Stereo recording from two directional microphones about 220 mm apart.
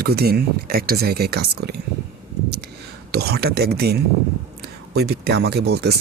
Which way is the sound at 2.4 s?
45° right (ahead or behind).